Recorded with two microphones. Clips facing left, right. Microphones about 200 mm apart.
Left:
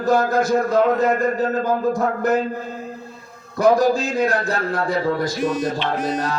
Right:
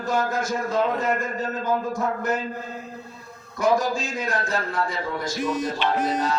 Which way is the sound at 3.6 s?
35° left (ahead or behind).